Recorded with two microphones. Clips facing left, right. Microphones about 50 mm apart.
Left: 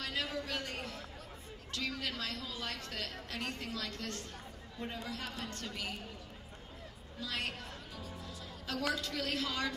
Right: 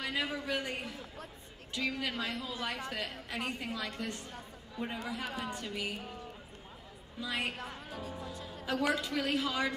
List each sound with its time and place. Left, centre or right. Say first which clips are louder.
0.0 s a woman's voice: right 3 dB; centre
7.2 s a woman's voice: right 3 dB; centre
7.5 s music: right 4 dB; right
8.5 s a woman's voice: right 5 dB; centre